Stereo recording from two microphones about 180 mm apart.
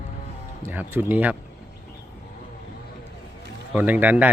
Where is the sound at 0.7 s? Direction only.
10° right (ahead or behind).